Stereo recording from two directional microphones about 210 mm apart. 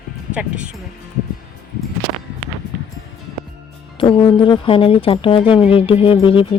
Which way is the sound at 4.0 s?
25° left (ahead or behind).